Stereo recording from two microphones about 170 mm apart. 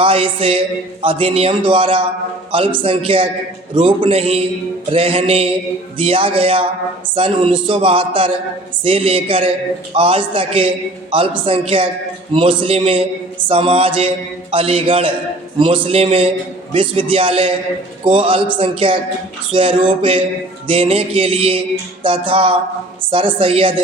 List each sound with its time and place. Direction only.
0.0 s a man's voice: 30° right (ahead or behind)